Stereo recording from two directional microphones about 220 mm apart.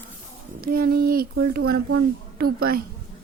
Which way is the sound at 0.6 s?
40° right (ahead or behind).